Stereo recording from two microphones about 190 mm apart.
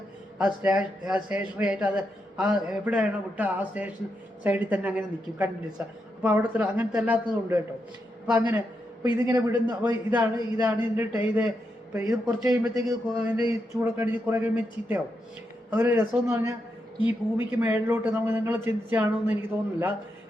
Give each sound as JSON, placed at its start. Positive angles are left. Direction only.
{"t": 0.3, "sound": "speech", "side_deg": -5}
{"t": 8.3, "sound": "speech", "side_deg": -10}
{"t": 12.7, "sound": "speech", "side_deg": -5}